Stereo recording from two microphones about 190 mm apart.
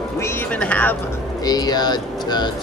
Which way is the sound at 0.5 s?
5° left (ahead or behind).